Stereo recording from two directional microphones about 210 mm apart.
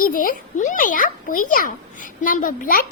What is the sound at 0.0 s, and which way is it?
A child's voice, 40° left (ahead or behind).